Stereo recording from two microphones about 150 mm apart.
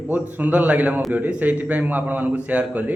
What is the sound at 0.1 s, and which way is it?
Speech, 10° right (ahead or behind).